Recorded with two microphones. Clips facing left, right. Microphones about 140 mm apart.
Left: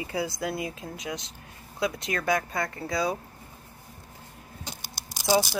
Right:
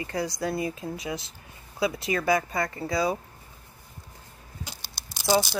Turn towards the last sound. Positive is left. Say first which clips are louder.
# even
turn(degrees=10)  # may be behind; listen again after turning